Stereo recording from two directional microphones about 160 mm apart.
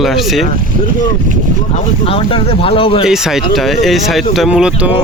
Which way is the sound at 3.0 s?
5° right (ahead or behind).